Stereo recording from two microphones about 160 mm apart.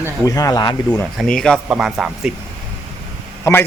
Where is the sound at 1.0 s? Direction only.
Centre (ahead or behind).